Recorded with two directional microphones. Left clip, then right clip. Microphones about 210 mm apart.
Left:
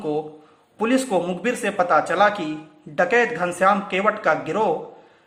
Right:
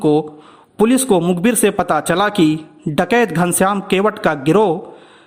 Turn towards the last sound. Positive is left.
turn(degrees=-50)  # may be behind; listen again after turning